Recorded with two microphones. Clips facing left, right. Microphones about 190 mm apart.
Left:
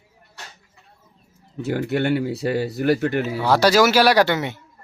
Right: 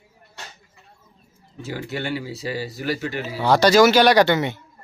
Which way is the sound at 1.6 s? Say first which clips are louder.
Left 7 dB; 60° left (ahead or behind).